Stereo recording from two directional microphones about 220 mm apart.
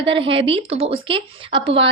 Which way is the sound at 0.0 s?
25° right (ahead or behind).